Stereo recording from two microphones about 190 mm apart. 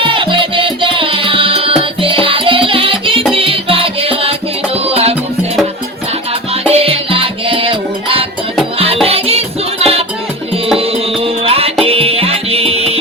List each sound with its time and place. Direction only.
0.1 s music: 25° right (ahead or behind)
6.5 s music: 30° right (ahead or behind)